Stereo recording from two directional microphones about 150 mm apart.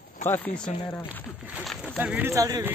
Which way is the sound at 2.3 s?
20° right (ahead or behind).